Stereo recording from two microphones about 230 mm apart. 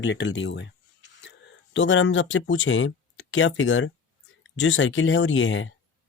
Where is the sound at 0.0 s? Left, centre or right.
Left.